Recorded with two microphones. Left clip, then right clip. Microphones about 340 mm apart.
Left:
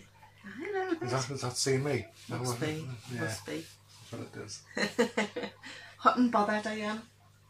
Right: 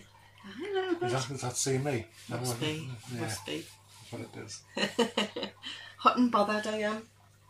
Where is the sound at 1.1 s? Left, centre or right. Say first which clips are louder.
Even; centre.